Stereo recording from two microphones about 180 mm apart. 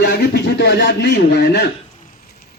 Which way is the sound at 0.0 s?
65° left (ahead or behind).